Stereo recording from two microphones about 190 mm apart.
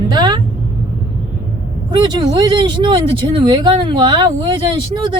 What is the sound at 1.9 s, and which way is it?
Speech, 25° right (ahead or behind).